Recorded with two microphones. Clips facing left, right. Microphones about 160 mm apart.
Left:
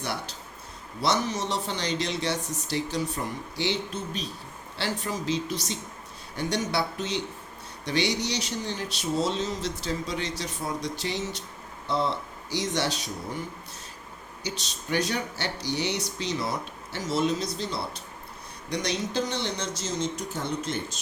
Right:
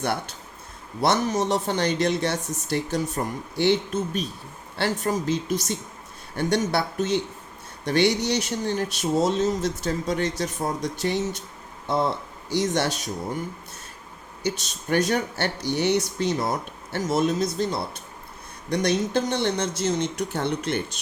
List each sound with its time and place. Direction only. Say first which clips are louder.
0.0 s speech: right 6 dB; 55° right (ahead or behind)
14.4 s speech: right 7 dB; 50° right (ahead or behind)